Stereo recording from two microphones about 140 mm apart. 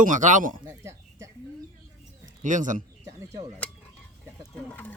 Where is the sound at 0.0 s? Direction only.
65° right (ahead or behind).